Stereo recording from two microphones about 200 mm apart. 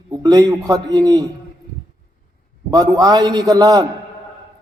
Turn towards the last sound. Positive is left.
turn(degrees=-20)  # may be behind; listen again after turning